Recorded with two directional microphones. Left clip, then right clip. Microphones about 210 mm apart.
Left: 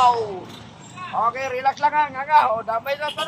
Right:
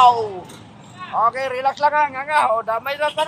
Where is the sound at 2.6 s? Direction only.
55° right (ahead or behind).